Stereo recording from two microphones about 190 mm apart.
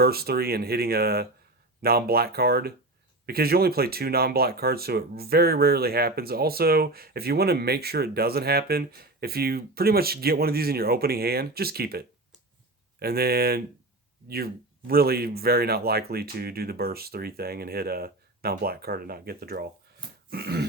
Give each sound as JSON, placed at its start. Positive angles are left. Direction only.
{"t": 0.0, "sound": "speech", "side_deg": -55}